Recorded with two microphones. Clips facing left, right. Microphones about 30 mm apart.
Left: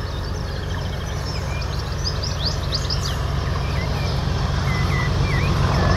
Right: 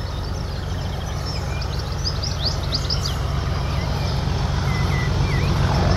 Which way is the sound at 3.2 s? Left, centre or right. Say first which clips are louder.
Left 1 dB; centre.